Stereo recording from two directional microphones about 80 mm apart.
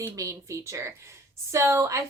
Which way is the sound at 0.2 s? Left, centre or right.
Right.